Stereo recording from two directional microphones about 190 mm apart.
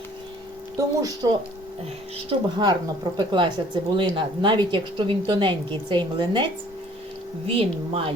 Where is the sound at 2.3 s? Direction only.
20° right (ahead or behind).